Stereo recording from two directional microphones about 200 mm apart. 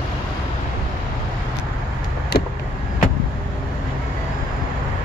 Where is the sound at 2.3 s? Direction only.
50° left (ahead or behind).